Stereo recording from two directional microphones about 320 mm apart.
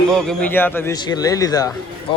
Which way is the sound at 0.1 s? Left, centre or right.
Centre.